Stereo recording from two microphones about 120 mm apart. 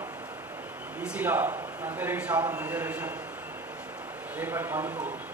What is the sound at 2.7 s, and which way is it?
Speech, 15° right (ahead or behind).